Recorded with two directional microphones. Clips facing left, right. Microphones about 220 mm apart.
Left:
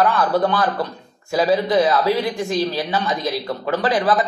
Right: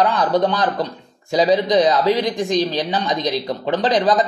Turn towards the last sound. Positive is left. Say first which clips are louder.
# right 2 dB
turn(degrees=-20)  # may be behind; listen again after turning